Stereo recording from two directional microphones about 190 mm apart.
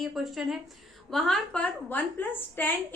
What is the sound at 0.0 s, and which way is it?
A woman's voice, centre (ahead or behind).